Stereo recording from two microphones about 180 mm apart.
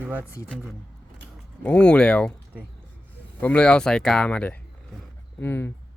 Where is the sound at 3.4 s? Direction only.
5° left (ahead or behind).